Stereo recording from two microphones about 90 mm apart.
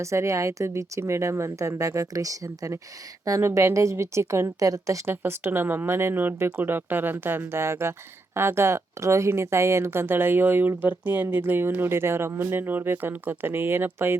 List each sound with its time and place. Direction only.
0.0 s speech: 35° right (ahead or behind)
5.2 s speech: 25° right (ahead or behind)